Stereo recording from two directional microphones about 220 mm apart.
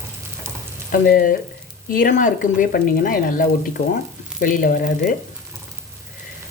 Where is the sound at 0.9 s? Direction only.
40° left (ahead or behind).